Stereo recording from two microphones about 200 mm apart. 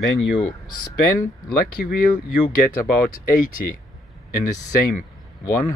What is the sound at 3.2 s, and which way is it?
Speech, 45° left (ahead or behind).